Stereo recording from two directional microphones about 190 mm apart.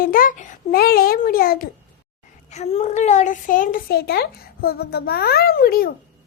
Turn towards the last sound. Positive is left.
turn(degrees=50)  # may be behind; listen again after turning